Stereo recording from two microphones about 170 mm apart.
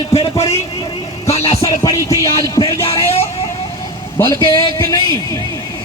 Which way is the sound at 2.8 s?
35° left (ahead or behind).